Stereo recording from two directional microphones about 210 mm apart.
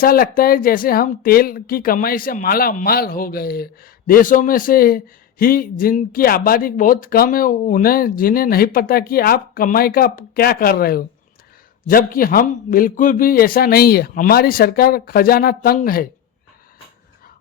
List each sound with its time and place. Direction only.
0.0 s speech: 45° left (ahead or behind)